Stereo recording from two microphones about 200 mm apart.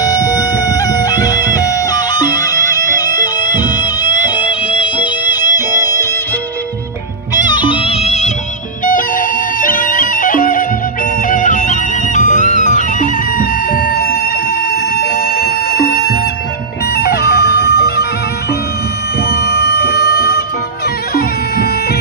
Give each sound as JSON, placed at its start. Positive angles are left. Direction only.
{"t": 0.0, "sound": "music", "side_deg": 20}
{"t": 7.3, "sound": "music", "side_deg": 20}
{"t": 8.8, "sound": "music", "side_deg": 45}
{"t": 19.2, "sound": "music", "side_deg": 50}